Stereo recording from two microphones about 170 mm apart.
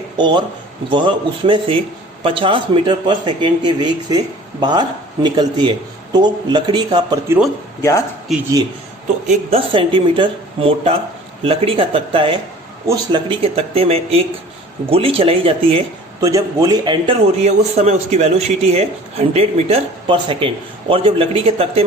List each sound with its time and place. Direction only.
0.2 s speech: 25° right (ahead or behind)
9.2 s speech: 40° right (ahead or behind)
16.2 s speech: 20° right (ahead or behind)
17.4 s speech: 40° right (ahead or behind)